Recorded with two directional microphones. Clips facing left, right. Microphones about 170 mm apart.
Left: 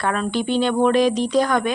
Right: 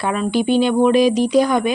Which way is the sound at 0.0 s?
10° right (ahead or behind).